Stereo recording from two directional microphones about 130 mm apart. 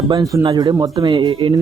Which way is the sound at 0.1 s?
30° right (ahead or behind).